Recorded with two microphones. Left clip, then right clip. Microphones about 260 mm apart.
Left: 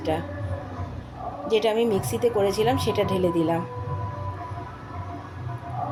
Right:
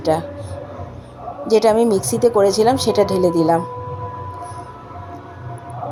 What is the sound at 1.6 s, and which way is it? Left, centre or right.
Speech, centre.